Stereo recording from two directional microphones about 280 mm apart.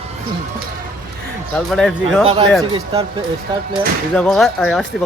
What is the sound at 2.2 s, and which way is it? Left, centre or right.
Speech, centre.